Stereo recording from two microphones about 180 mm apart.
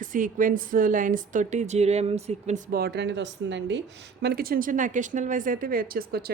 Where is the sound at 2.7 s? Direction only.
65° right (ahead or behind).